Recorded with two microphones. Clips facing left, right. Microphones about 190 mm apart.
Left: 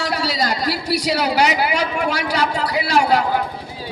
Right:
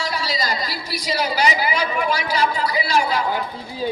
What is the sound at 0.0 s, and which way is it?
A man's voice, 70° left (ahead or behind).